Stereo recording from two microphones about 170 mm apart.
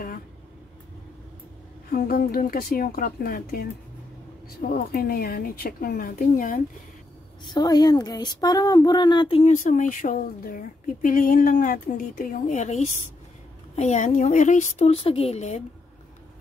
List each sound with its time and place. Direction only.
1.9 s speech: 60° left (ahead or behind)
7.4 s speech: 25° left (ahead or behind)
9.4 s speech: 50° left (ahead or behind)